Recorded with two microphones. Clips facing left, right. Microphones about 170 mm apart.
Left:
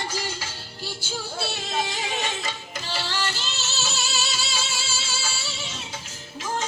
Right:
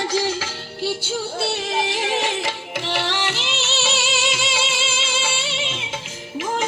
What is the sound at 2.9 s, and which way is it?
Music, 70° right (ahead or behind).